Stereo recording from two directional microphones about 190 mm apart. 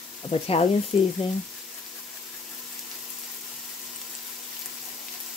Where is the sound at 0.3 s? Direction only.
30° left (ahead or behind).